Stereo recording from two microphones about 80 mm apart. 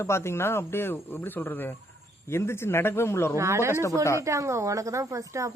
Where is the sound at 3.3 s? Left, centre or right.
Right.